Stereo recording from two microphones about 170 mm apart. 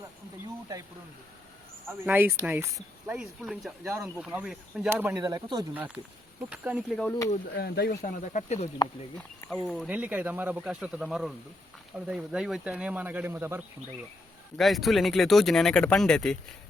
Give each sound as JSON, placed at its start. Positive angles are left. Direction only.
{"t": 1.9, "sound": "speech", "side_deg": -10}
{"t": 2.7, "sound": "speech", "side_deg": 0}
{"t": 5.2, "sound": "speech", "side_deg": -25}
{"t": 5.7, "sound": "speech", "side_deg": -10}
{"t": 7.6, "sound": "speech", "side_deg": 70}
{"t": 8.0, "sound": "speech", "side_deg": 50}
{"t": 9.1, "sound": "speech", "side_deg": 0}
{"t": 14.6, "sound": "speech", "side_deg": 0}